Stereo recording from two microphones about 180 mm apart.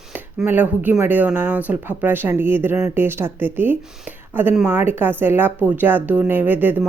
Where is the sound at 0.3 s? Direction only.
10° right (ahead or behind).